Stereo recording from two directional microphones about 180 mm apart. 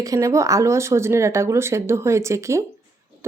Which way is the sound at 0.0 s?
20° right (ahead or behind).